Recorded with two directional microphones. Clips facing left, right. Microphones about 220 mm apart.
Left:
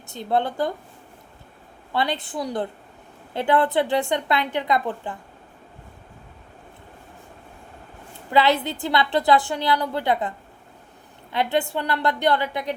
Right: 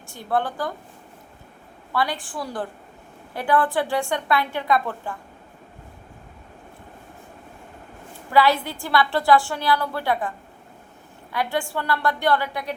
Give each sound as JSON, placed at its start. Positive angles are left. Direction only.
{"t": 0.1, "sound": "a woman's voice", "side_deg": 20}
{"t": 1.9, "sound": "a woman's voice", "side_deg": 25}
{"t": 8.3, "sound": "a woman's voice", "side_deg": 20}